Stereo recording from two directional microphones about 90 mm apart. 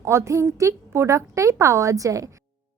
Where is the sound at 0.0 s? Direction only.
30° right (ahead or behind).